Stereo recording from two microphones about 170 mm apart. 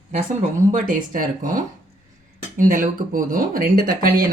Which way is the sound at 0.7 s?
50° right (ahead or behind).